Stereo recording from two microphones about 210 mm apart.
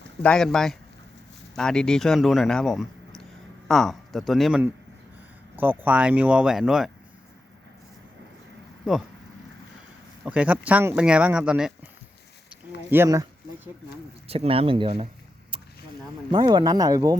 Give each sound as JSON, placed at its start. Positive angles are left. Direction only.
{"t": 0.2, "sound": "speech", "side_deg": 5}
{"t": 10.2, "sound": "speech", "side_deg": -5}
{"t": 12.9, "sound": "speech", "side_deg": -15}
{"t": 14.3, "sound": "speech", "side_deg": -25}
{"t": 16.3, "sound": "speech", "side_deg": -20}